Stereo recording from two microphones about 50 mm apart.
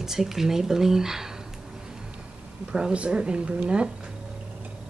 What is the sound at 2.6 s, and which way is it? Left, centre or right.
A woman's voice, centre.